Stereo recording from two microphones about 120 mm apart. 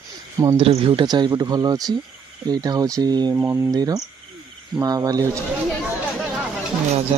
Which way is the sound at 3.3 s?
20° right (ahead or behind).